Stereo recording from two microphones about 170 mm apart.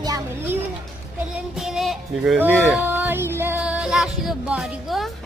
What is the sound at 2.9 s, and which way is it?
Music, 10° right (ahead or behind).